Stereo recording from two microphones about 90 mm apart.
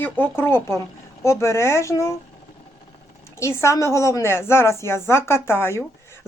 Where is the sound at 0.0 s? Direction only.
25° left (ahead or behind).